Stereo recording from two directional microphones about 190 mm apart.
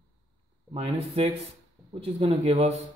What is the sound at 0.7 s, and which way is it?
Speech, 30° right (ahead or behind).